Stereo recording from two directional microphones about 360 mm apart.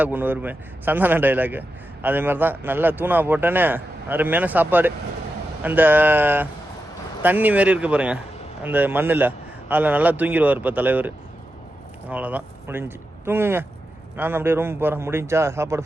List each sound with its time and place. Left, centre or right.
0.0 s a man's voice: centre
12.1 s a man's voice: centre